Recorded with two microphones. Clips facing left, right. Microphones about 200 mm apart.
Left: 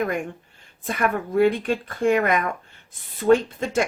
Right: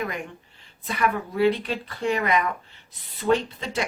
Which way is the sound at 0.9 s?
50° left (ahead or behind).